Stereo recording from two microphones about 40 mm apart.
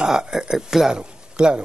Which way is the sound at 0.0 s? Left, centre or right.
Centre.